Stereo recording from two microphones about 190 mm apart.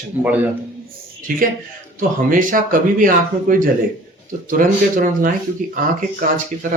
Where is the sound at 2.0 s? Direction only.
45° right (ahead or behind).